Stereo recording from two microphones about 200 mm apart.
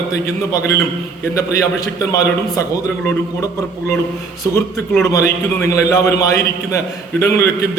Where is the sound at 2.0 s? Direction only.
15° left (ahead or behind).